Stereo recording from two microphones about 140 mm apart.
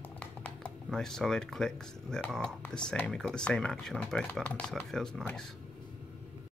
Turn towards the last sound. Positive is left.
turn(degrees=5)  # may be behind; listen again after turning